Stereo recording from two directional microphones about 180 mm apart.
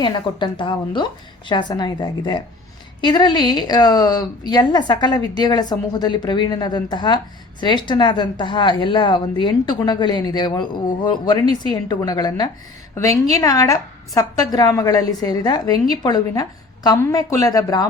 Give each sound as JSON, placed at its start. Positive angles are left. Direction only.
{"t": 0.0, "sound": "a woman's voice", "side_deg": 25}